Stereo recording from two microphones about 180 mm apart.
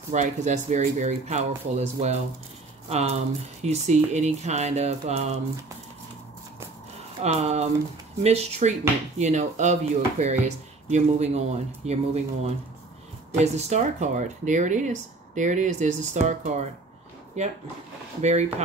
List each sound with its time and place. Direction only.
0.1 s speech: 40° right (ahead or behind)
7.2 s speech: 35° right (ahead or behind)
18.2 s speech: 40° right (ahead or behind)